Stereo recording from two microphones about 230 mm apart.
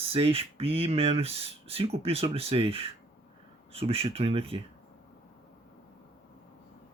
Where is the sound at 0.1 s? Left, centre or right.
Right.